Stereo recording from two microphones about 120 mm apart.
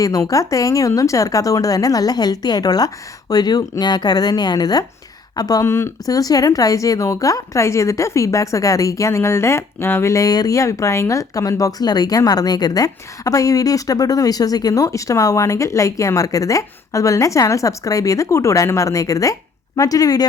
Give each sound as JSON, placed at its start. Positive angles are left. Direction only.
{"t": 0.0, "sound": "speech", "side_deg": 30}